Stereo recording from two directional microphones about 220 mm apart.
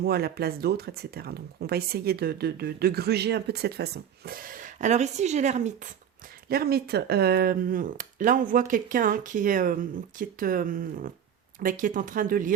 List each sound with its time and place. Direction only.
0.0 s speech: 45° right (ahead or behind)
6.5 s speech: 45° right (ahead or behind)